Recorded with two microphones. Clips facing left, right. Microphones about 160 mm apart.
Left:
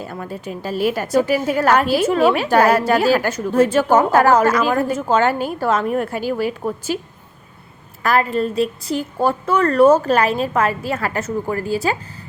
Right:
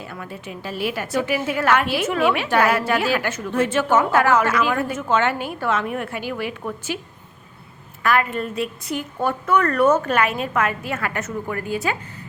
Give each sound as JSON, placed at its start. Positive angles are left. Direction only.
{"t": 0.0, "sound": "a woman's voice", "side_deg": 40}
{"t": 8.0, "sound": "a woman's voice", "side_deg": 35}